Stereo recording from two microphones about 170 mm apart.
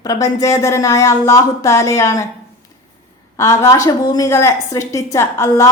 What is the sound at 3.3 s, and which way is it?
A woman's voice, 20° left (ahead or behind).